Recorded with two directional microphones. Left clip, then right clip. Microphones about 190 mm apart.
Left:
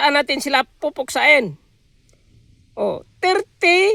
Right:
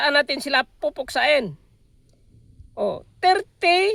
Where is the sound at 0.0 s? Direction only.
35° left (ahead or behind).